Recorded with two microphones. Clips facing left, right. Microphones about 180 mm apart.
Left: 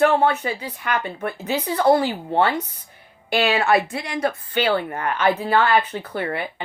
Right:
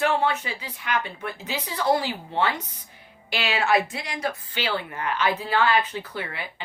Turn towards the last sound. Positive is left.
turn(degrees=55)  # may be behind; listen again after turning